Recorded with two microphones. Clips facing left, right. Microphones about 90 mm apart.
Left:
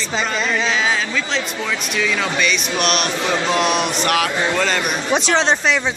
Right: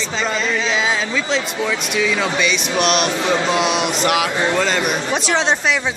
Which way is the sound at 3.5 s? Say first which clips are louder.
Even; 10° right (ahead or behind).